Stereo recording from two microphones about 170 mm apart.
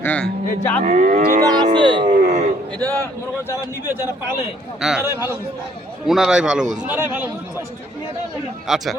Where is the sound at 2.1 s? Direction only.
40° right (ahead or behind).